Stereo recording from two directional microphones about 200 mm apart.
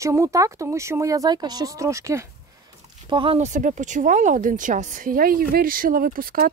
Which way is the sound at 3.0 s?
25° right (ahead or behind).